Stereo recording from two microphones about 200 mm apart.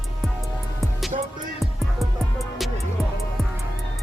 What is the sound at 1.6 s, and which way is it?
Music, centre (ahead or behind).